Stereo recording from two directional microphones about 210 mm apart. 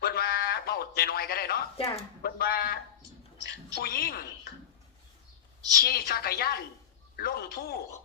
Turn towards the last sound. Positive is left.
turn(degrees=45)  # may be behind; listen again after turning